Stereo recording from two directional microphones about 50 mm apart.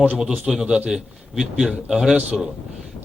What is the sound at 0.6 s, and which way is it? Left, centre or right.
Speech, centre.